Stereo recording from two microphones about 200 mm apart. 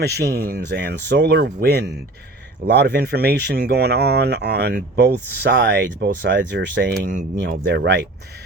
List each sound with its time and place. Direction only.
0.0 s speech: 55° right (ahead or behind)